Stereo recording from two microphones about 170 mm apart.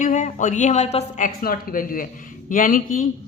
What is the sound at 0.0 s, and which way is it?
Speech, 50° left (ahead or behind).